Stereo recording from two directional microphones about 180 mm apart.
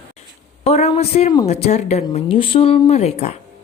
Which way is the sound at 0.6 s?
35° left (ahead or behind).